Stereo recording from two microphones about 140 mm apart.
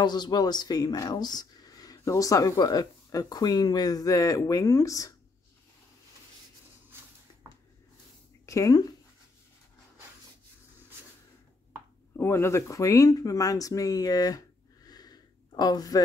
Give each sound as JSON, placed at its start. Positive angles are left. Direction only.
{"t": 0.0, "sound": "speech", "side_deg": 30}
{"t": 8.5, "sound": "speech", "side_deg": 25}
{"t": 12.2, "sound": "speech", "side_deg": 20}